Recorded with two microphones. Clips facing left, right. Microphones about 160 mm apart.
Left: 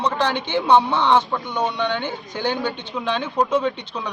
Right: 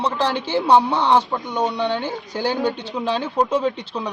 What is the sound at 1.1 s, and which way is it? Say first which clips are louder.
Speech: right 1 dB; 10° right (ahead or behind).